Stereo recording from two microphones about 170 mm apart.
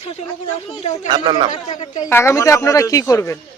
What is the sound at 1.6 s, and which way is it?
Speech, 45° left (ahead or behind).